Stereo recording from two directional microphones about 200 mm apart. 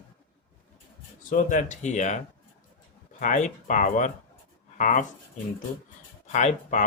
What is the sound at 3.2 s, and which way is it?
Speech, 40° left (ahead or behind).